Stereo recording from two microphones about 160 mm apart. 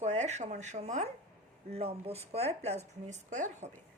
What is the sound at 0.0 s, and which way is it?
Speech, 45° right (ahead or behind).